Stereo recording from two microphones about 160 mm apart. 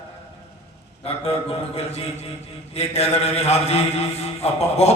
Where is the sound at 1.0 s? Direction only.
40° left (ahead or behind).